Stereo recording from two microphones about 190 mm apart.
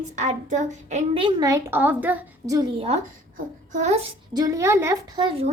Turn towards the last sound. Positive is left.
turn(degrees=-30)  # may be behind; listen again after turning